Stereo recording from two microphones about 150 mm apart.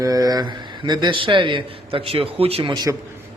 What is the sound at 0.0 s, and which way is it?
A man's voice, 25° right (ahead or behind).